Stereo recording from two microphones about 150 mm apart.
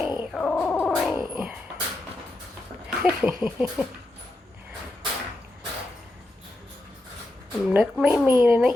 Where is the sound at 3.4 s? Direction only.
5° right (ahead or behind).